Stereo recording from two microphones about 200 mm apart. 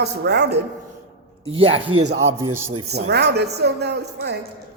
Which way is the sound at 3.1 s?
55° right (ahead or behind).